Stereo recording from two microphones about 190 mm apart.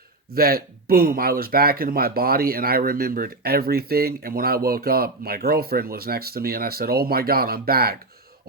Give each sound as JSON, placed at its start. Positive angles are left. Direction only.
{"t": 0.3, "sound": "speech", "side_deg": -55}